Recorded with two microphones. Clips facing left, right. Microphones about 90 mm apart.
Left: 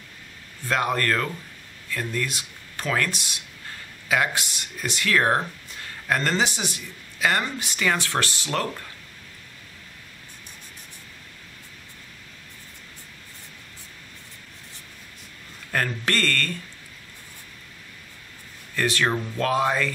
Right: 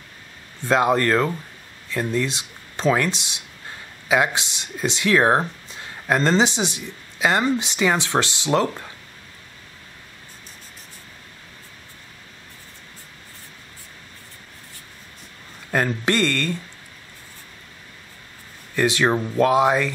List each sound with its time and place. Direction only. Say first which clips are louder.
0.7 s speech: right 6 dB; 20° right (ahead or behind)
15.7 s speech: right 4 dB; 20° right (ahead or behind)
18.8 s speech: right 4 dB; 20° right (ahead or behind)